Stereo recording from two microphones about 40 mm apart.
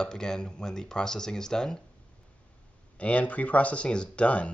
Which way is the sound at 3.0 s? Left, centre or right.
Left.